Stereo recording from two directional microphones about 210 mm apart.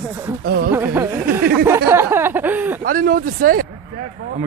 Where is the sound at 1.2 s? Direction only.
45° right (ahead or behind).